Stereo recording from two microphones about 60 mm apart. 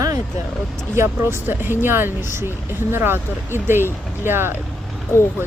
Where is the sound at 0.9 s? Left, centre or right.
Right.